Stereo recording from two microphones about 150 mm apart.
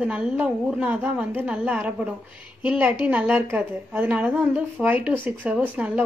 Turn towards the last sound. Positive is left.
turn(degrees=-10)  # may be behind; listen again after turning